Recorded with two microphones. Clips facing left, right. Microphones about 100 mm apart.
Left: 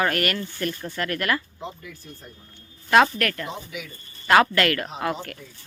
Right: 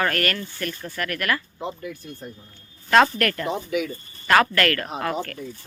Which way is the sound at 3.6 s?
55° right (ahead or behind).